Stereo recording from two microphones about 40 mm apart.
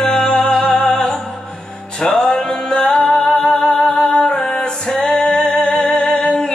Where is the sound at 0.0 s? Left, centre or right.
Centre.